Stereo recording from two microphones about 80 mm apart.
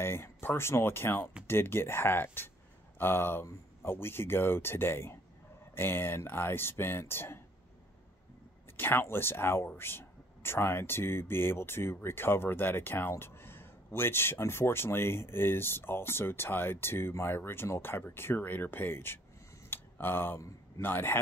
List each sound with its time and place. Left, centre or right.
0.0 s speech: left
8.7 s speech: left
19.7 s a sound: left
20.8 s speech: left